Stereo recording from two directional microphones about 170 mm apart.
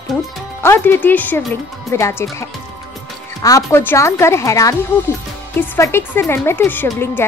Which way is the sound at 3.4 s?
15° left (ahead or behind).